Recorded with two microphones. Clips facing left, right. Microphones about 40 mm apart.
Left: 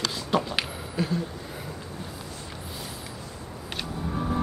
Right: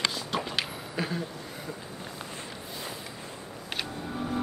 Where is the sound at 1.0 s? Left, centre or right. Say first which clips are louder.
Left 3 dB; centre.